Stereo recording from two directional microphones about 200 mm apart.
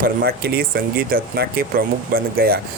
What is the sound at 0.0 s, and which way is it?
Speech, 50° right (ahead or behind).